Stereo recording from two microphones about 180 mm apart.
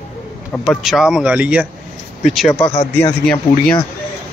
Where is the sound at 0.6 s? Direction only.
Centre (ahead or behind).